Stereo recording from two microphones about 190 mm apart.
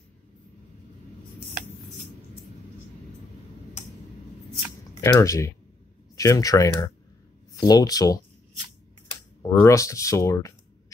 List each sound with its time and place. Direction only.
5.0 s speech: 15° left (ahead or behind)
9.4 s speech: 15° left (ahead or behind)